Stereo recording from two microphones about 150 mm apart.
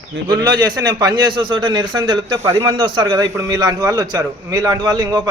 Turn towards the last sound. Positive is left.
turn(degrees=-25)  # may be behind; listen again after turning